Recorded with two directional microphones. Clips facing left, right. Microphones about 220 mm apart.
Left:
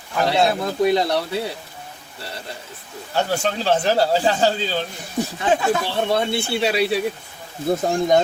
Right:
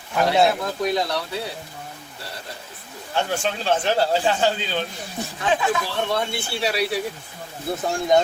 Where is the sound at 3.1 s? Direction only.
40° left (ahead or behind).